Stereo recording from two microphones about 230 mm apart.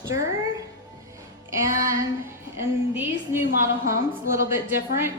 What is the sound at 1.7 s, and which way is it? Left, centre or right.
Speech, right.